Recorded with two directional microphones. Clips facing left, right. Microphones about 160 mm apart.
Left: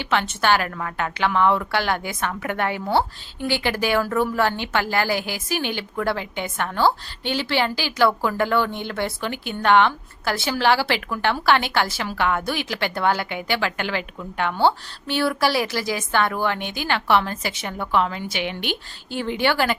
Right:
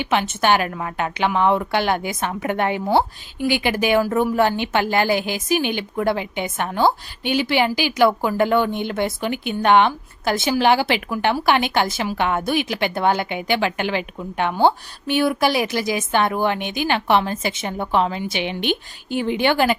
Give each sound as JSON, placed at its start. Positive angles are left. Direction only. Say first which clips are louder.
{"t": 0.0, "sound": "a woman's voice", "louder": "right 2 dB", "side_deg": -15}